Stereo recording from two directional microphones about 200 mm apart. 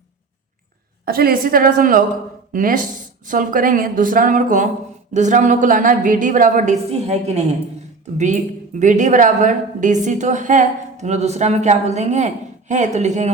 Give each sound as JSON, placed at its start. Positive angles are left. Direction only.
{"t": 1.0, "sound": "a woman's voice", "side_deg": -50}